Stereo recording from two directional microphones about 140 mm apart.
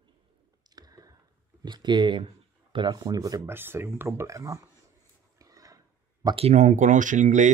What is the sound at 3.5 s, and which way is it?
Speech, 15° right (ahead or behind).